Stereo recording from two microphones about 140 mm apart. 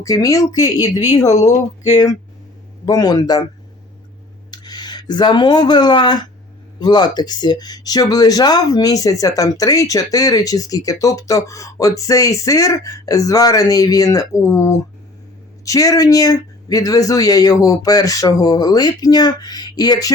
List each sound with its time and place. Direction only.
0.0 s speech: 25° left (ahead or behind)
2.8 s speech: 25° left (ahead or behind)
4.5 s speech: 30° left (ahead or behind)